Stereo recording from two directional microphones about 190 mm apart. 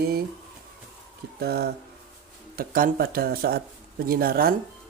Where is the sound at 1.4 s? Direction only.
55° right (ahead or behind).